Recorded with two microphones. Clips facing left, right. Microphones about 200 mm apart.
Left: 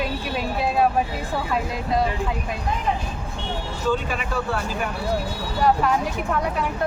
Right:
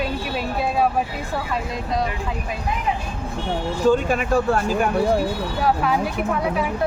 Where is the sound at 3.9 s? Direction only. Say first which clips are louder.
Right 5 dB; 45° right (ahead or behind).